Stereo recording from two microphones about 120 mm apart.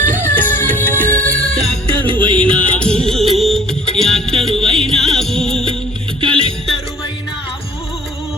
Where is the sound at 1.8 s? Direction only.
40° right (ahead or behind).